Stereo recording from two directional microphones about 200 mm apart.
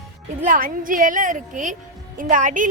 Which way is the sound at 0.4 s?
45° right (ahead or behind).